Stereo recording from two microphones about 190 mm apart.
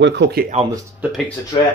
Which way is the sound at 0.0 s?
65° right (ahead or behind).